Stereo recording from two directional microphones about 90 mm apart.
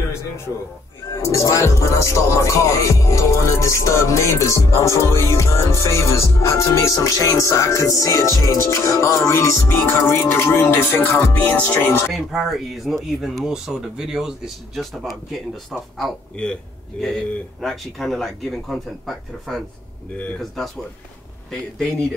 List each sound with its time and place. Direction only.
1.1 s music: 35° left (ahead or behind)
12.1 s speech: centre (ahead or behind)